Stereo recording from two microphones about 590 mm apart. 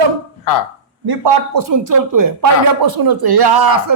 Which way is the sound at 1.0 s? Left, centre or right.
Right.